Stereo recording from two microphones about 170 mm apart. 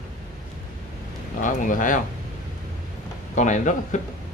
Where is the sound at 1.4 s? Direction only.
50° left (ahead or behind).